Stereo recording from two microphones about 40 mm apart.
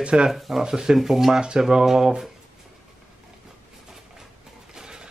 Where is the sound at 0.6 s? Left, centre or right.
Centre.